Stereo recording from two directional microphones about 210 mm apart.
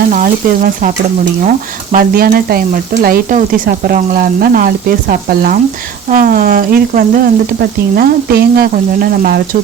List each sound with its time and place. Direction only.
0.1 s frying: 40° right (ahead or behind)